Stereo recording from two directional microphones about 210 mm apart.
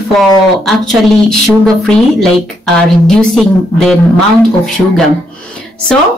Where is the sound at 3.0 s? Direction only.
Centre (ahead or behind).